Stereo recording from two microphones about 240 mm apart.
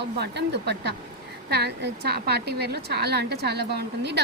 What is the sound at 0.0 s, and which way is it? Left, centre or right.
A woman's voice, right.